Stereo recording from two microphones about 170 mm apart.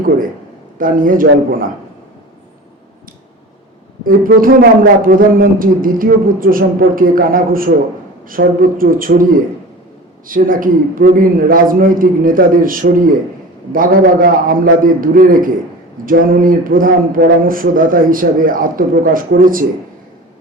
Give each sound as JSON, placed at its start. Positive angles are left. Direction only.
{"t": 0.8, "sound": "a man's voice", "side_deg": -55}
{"t": 4.0, "sound": "speech", "side_deg": -55}